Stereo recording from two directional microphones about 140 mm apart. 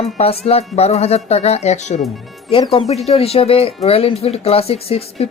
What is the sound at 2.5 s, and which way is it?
Speech, 40° left (ahead or behind).